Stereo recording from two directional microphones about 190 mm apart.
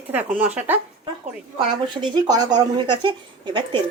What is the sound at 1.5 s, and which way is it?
Speech, 25° right (ahead or behind).